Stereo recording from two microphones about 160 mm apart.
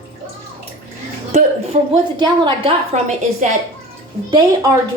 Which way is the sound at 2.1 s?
30° right (ahead or behind).